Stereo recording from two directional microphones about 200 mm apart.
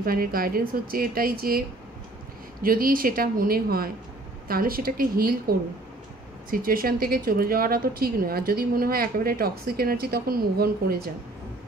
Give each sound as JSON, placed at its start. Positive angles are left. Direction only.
{"t": 0.0, "sound": "a woman's voice", "side_deg": -45}
{"t": 2.6, "sound": "a woman's voice", "side_deg": -45}